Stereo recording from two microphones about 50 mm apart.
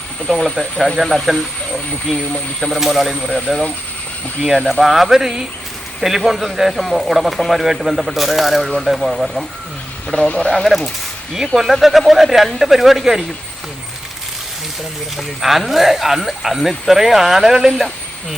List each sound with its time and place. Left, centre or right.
0.2 s a man's voice: centre
2.8 s a man's voice: centre
3.3 s speech: centre
4.5 s a man's voice: centre
10.2 s speech: left
10.5 s a man's voice: centre
15.4 s a man's voice: centre